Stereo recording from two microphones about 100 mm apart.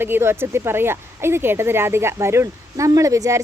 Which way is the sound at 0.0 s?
25° right (ahead or behind).